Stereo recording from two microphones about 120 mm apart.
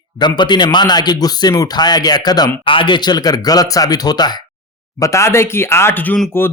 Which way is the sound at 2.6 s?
45° left (ahead or behind).